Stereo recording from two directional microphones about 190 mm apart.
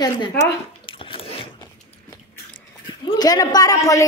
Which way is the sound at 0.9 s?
30° left (ahead or behind).